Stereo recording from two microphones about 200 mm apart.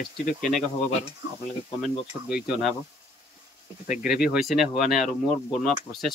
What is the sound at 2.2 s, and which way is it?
Speech, 5° right (ahead or behind).